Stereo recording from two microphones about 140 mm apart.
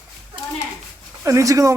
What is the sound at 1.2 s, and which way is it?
Speech, 20° right (ahead or behind).